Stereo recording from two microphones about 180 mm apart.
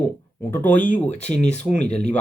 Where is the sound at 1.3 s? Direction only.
40° left (ahead or behind).